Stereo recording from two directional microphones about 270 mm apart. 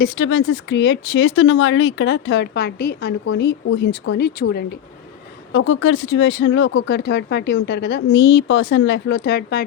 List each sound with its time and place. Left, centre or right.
0.0 s speech: left
5.5 s speech: left